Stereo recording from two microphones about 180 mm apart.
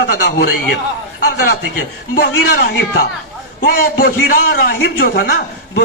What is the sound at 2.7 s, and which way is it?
A man's voice, 65° left (ahead or behind).